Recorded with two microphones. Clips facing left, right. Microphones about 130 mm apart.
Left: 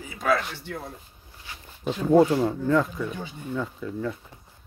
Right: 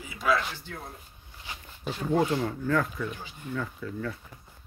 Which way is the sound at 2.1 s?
25° left (ahead or behind).